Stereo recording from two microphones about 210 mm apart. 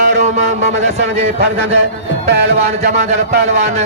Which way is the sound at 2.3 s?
50° right (ahead or behind).